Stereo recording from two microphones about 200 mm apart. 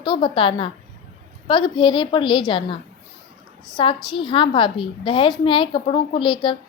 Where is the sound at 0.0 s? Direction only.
25° left (ahead or behind).